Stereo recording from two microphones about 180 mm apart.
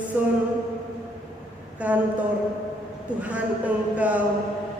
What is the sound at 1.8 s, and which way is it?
Speech, 10° right (ahead or behind).